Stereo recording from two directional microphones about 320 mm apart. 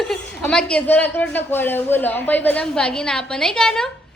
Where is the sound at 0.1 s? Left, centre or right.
Centre.